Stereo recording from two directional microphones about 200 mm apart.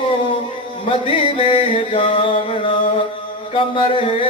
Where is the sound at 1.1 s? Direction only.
25° left (ahead or behind).